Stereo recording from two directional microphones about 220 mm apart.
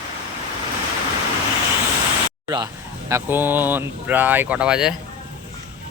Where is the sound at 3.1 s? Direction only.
10° right (ahead or behind).